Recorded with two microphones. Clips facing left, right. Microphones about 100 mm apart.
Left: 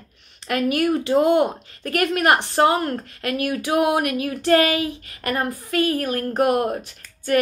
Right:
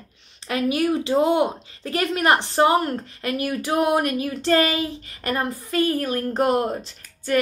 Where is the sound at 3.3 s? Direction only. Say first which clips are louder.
Left 1 dB; 30° right (ahead or behind).